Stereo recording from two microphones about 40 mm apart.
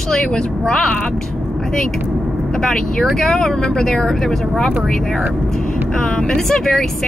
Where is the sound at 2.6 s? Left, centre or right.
Centre.